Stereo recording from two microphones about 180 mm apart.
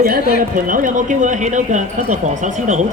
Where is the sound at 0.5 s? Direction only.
50° right (ahead or behind).